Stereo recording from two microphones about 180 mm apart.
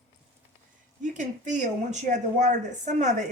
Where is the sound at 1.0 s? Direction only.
45° right (ahead or behind).